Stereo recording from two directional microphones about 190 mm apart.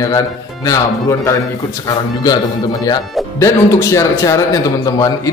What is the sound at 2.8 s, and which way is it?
A man's voice, 15° left (ahead or behind).